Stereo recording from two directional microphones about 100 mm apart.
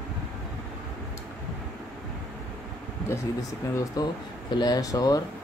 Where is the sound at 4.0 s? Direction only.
40° left (ahead or behind).